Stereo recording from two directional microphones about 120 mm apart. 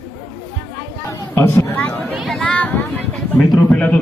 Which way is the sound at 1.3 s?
15° left (ahead or behind).